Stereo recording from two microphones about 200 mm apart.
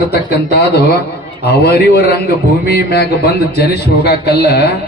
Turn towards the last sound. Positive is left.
turn(degrees=55)  # may be behind; listen again after turning